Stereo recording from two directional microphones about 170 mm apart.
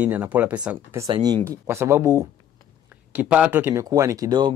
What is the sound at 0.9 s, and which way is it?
Speech, 25° right (ahead or behind).